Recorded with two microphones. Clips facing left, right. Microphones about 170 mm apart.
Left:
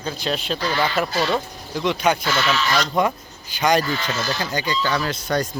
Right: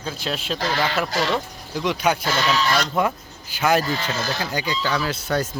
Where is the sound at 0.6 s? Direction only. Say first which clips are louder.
Right 1 dB; 85° right.